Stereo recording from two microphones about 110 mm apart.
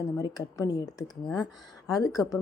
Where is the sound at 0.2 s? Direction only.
35° left (ahead or behind).